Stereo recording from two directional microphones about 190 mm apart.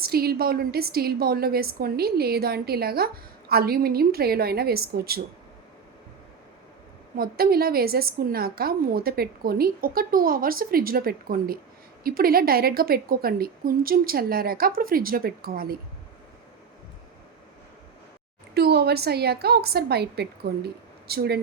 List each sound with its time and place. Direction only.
0.0 s a woman's voice: 55° right (ahead or behind)
7.2 s a woman's voice: 50° right (ahead or behind)
18.5 s a woman's voice: 55° right (ahead or behind)